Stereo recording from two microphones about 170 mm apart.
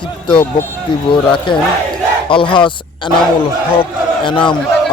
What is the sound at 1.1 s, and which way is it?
Speech, 30° left (ahead or behind).